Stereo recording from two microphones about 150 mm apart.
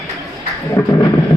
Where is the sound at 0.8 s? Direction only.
20° left (ahead or behind).